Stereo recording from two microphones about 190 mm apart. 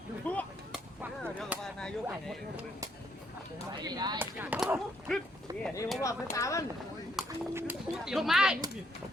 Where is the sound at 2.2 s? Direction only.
5° right (ahead or behind).